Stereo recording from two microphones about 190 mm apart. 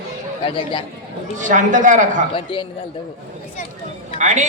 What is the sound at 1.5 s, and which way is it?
Speech, 40° right (ahead or behind).